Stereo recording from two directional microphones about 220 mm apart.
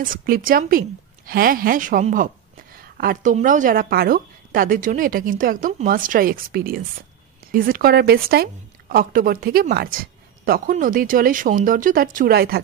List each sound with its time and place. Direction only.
0.0 s a woman's voice: 40° right (ahead or behind)